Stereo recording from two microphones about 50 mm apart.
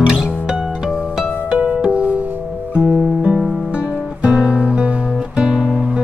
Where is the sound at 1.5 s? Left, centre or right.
Right.